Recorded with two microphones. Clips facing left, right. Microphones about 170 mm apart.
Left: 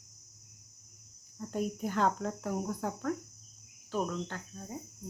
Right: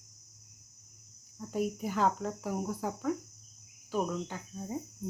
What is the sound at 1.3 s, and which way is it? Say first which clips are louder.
Speech: right 1 dB; 5° right (ahead or behind).